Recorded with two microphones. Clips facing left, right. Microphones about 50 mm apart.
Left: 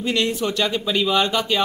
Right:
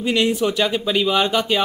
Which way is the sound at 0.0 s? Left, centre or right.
Centre.